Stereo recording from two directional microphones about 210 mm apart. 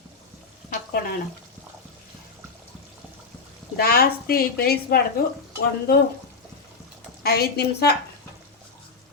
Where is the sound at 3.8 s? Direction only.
45° left (ahead or behind).